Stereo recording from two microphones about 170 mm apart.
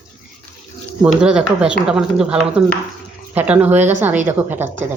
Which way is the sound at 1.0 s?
5° right (ahead or behind).